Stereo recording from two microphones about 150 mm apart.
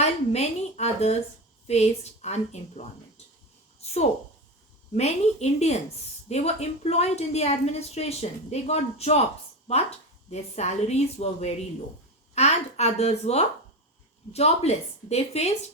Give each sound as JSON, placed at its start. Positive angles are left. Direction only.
{"t": 0.0, "sound": "a woman's voice", "side_deg": 45}
{"t": 3.8, "sound": "a sound", "side_deg": 45}
{"t": 4.9, "sound": "a woman's voice", "side_deg": 45}